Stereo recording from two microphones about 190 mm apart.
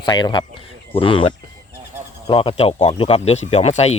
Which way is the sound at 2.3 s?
30° left (ahead or behind).